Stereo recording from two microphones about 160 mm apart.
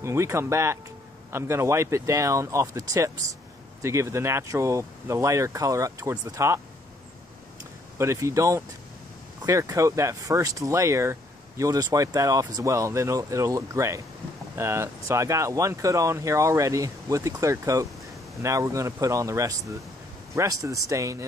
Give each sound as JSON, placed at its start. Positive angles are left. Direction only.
{"t": 0.0, "sound": "speech", "side_deg": -15}
{"t": 8.0, "sound": "speech", "side_deg": -20}